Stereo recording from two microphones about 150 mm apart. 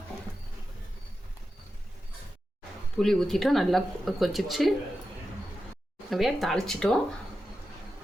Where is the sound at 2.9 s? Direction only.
5° left (ahead or behind).